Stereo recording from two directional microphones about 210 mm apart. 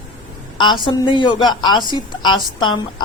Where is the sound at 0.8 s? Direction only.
20° left (ahead or behind).